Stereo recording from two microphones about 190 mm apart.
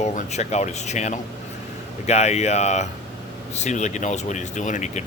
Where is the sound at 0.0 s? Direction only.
35° left (ahead or behind).